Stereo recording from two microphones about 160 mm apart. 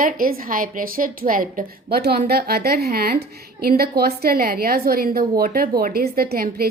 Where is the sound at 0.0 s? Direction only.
60° right (ahead or behind).